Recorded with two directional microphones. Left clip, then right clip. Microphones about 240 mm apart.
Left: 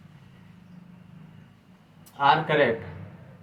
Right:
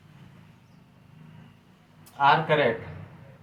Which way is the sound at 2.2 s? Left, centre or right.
Centre.